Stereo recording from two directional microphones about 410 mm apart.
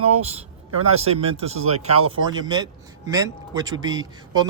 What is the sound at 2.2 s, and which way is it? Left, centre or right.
A man's voice, centre.